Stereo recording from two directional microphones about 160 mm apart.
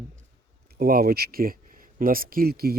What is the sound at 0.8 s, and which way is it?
Speech, 65° right (ahead or behind).